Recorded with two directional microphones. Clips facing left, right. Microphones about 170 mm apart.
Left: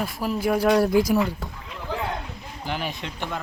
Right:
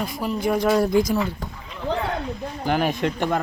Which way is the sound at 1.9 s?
75° right (ahead or behind).